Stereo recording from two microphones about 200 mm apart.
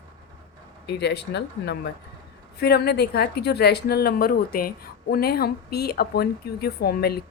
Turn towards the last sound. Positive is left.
turn(degrees=50)  # may be behind; listen again after turning